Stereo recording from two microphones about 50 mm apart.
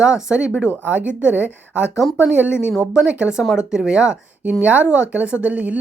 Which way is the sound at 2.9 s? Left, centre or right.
Right.